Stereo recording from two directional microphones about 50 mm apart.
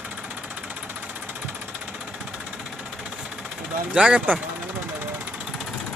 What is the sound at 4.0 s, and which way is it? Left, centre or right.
Speech, centre.